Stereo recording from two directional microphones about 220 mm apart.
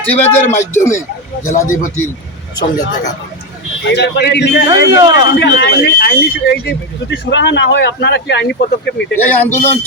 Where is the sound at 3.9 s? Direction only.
50° left (ahead or behind).